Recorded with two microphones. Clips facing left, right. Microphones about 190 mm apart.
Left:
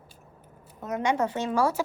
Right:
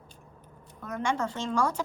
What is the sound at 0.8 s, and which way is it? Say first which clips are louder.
Speech: left 4 dB; 25° left (ahead or behind).